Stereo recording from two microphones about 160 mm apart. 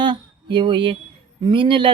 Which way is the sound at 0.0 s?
30° right (ahead or behind).